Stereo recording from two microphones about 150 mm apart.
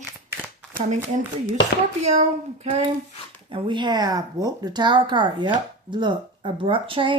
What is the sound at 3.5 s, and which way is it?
Speech, 30° right (ahead or behind).